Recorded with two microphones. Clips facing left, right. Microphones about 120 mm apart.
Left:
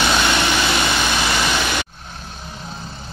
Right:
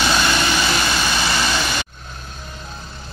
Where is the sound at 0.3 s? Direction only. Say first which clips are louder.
Left 1 dB; 15° left (ahead or behind).